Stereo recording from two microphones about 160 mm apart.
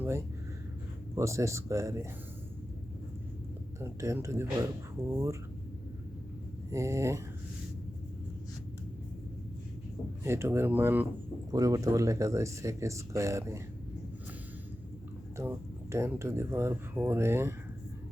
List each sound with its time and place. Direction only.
1.1 s speech: 20° right (ahead or behind)
3.8 s speech: 15° right (ahead or behind)
6.7 s speech: 20° right (ahead or behind)
10.2 s speech: 15° right (ahead or behind)
15.4 s speech: 15° right (ahead or behind)